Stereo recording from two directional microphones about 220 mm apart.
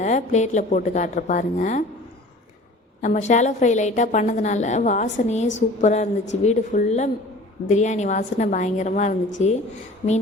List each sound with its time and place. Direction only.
0.0 s a woman's voice: 35° left (ahead or behind)
3.0 s a woman's voice: 35° left (ahead or behind)